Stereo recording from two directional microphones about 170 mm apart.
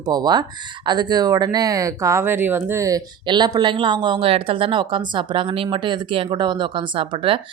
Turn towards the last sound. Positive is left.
turn(degrees=-30)  # may be behind; listen again after turning